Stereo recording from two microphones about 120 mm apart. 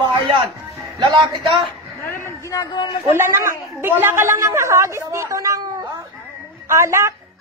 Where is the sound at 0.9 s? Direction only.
40° right (ahead or behind).